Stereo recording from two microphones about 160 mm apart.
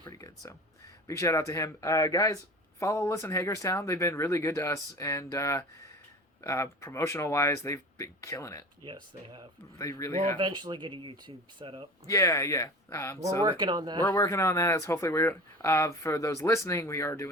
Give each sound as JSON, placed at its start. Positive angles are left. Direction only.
{"t": 0.0, "sound": "a sound", "side_deg": 20}
{"t": 1.0, "sound": "speech", "side_deg": 20}
{"t": 8.8, "sound": "speech", "side_deg": -30}
{"t": 9.7, "sound": "speech", "side_deg": 20}
{"t": 10.3, "sound": "speech", "side_deg": -30}
{"t": 12.0, "sound": "speech", "side_deg": 20}
{"t": 13.4, "sound": "speech", "side_deg": -30}
{"t": 14.1, "sound": "speech", "side_deg": 20}